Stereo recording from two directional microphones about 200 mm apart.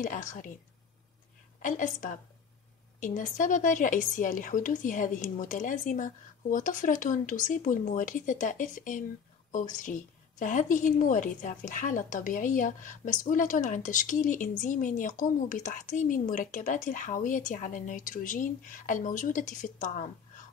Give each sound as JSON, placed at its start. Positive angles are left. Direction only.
{"t": 0.0, "sound": "a woman's voice", "side_deg": 40}
{"t": 1.6, "sound": "a woman's voice", "side_deg": 40}